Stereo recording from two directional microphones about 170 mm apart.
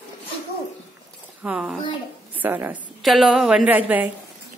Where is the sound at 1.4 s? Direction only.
5° right (ahead or behind).